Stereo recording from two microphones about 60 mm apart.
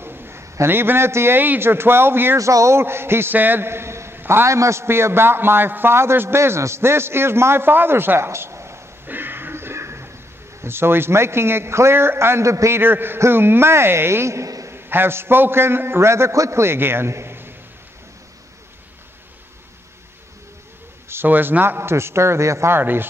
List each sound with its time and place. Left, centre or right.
0.0 s a man's voice: right
2.3 s a man's voice: right
4.2 s a sound: right
4.5 s a man's voice: right
8.3 s a sound: right
9.0 s a sound: right
10.6 s a man's voice: right
12.7 s a man's voice: right
14.7 s a man's voice: right
21.1 s a man's voice: right
22.7 s a man's voice: right